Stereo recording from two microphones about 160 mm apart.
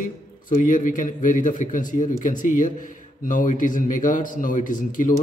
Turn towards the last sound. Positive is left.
turn(degrees=55)  # may be behind; listen again after turning